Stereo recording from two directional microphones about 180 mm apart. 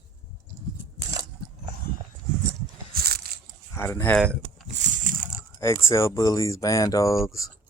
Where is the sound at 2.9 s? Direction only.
60° right (ahead or behind).